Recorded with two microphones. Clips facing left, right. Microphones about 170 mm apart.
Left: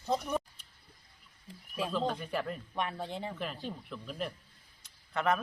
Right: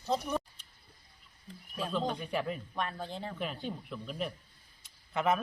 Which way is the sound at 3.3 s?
Centre (ahead or behind).